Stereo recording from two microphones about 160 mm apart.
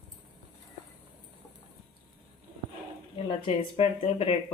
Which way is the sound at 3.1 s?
35° left (ahead or behind).